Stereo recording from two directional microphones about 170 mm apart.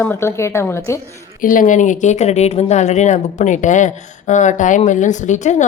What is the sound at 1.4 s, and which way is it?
Speech, 50° left (ahead or behind).